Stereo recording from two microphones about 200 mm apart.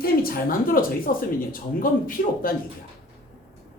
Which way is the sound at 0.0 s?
50° left (ahead or behind).